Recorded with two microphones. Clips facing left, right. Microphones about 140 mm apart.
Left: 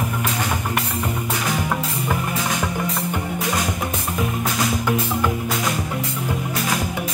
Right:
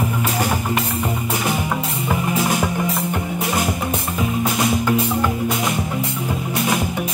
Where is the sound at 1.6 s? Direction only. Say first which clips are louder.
Right 1 dB; 5° right (ahead or behind).